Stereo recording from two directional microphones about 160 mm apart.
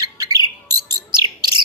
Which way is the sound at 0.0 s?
25° right (ahead or behind).